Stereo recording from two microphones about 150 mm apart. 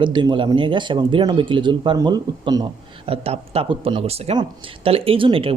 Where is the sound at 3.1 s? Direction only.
40° right (ahead or behind).